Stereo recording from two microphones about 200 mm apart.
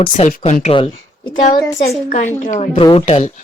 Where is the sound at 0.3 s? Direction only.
40° left (ahead or behind); by 2.0 s 15° left (ahead or behind).